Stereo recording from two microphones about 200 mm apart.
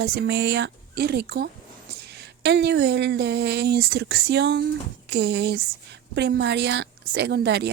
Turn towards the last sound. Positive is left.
turn(degrees=-60)  # may be behind; listen again after turning